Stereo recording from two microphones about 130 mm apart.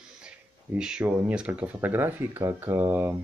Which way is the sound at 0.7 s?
5° right (ahead or behind).